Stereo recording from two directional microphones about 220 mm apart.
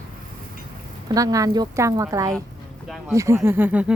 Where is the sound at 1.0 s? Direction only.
15° right (ahead or behind).